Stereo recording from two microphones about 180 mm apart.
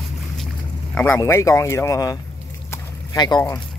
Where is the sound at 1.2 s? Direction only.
15° left (ahead or behind).